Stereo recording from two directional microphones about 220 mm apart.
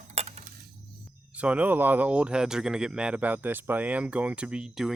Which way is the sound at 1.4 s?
5° right (ahead or behind).